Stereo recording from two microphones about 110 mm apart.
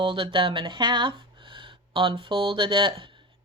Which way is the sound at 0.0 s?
50° right (ahead or behind).